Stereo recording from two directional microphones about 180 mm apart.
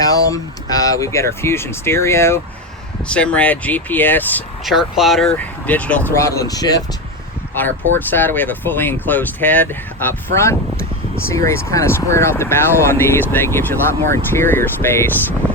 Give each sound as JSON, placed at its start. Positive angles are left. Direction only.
{"t": 0.0, "sound": "speech", "side_deg": 20}
{"t": 4.6, "sound": "speech", "side_deg": 0}
{"t": 7.5, "sound": "speech", "side_deg": 10}